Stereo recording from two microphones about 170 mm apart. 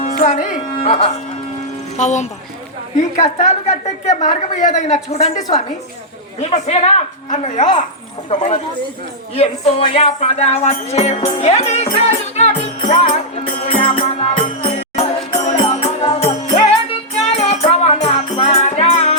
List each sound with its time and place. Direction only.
0.0 s music: 50° left (ahead or behind)
0.8 s speech: 35° left (ahead or behind)
2.0 s a woman's voice: 45° left (ahead or behind)
6.4 s speech: 40° left (ahead or behind)
11.3 s music: 40° left (ahead or behind)